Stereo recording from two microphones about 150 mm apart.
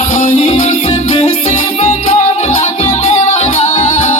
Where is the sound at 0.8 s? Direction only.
35° left (ahead or behind).